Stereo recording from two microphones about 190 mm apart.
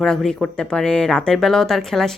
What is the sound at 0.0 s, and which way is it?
Speech, centre (ahead or behind).